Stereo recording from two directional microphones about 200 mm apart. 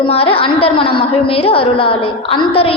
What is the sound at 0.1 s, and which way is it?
A woman's voice, 30° left (ahead or behind).